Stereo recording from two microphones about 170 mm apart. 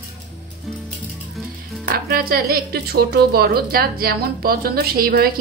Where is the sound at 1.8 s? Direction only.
65° right (ahead or behind).